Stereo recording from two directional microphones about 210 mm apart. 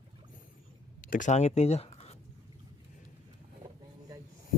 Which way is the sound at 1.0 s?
40° left (ahead or behind).